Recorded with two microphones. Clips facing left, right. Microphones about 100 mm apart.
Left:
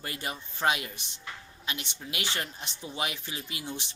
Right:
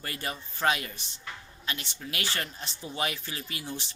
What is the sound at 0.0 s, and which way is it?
Speech, 15° left (ahead or behind).